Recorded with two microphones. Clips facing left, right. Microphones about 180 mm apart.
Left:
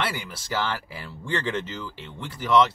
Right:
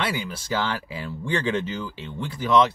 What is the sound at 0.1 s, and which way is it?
Speech, 15° right (ahead or behind).